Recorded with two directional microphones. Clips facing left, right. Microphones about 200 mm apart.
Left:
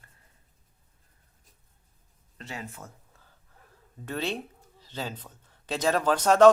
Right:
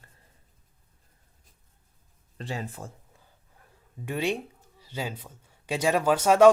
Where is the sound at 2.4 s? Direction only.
30° right (ahead or behind).